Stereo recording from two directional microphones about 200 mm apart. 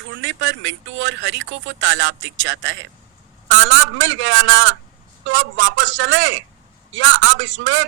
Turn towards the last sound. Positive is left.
turn(degrees=-70)  # may be behind; listen again after turning